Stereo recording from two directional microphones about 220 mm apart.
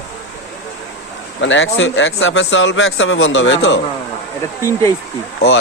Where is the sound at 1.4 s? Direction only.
60° left (ahead or behind).